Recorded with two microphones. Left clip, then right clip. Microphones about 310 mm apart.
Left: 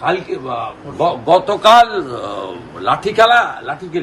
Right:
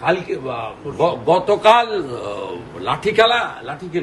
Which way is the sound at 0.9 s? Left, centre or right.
Centre.